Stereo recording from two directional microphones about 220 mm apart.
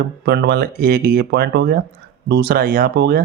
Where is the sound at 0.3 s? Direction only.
50° right (ahead or behind).